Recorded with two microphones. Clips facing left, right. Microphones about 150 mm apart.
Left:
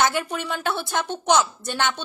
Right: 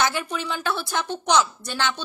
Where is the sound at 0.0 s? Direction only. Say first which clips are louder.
Left 2 dB; 50° left (ahead or behind).